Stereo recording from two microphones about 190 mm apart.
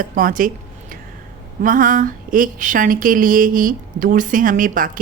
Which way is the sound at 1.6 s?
45° right (ahead or behind).